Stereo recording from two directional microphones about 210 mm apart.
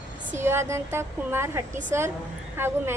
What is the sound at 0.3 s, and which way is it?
A woman's voice, 10° right (ahead or behind).